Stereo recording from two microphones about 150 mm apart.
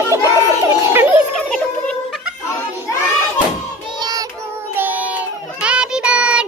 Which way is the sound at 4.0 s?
25° right (ahead or behind).